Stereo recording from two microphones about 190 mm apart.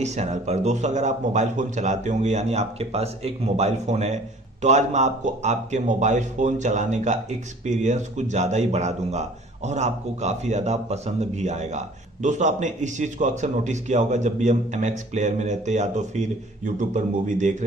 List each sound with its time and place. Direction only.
0.0 s speech: 35° right (ahead or behind)